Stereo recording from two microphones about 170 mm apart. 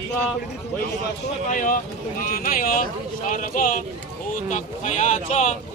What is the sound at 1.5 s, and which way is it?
Speech, 50° left (ahead or behind).